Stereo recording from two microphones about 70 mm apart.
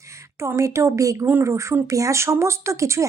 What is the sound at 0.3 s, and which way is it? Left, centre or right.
Speech, right.